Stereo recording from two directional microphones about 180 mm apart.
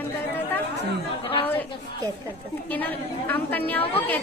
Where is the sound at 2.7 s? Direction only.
10° left (ahead or behind).